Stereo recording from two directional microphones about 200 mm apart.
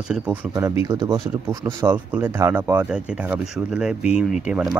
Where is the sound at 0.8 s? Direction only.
15° right (ahead or behind).